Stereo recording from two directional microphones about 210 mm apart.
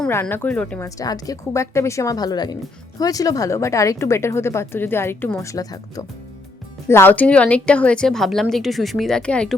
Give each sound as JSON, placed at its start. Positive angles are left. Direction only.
{"t": 0.0, "sound": "a woman's voice", "side_deg": 10}
{"t": 0.9, "sound": "a woman's voice", "side_deg": 15}